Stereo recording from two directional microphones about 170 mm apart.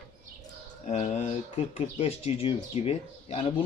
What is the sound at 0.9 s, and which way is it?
Speech, 45° left (ahead or behind).